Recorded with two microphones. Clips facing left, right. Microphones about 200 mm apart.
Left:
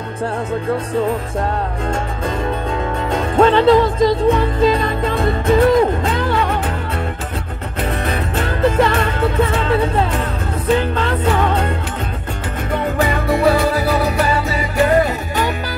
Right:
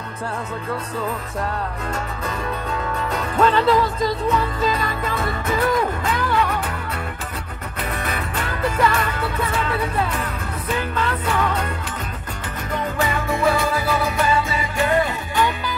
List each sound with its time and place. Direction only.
3.1 s music: 30° left (ahead or behind)
8.0 s music: 30° left (ahead or behind)
13.0 s music: 35° left (ahead or behind)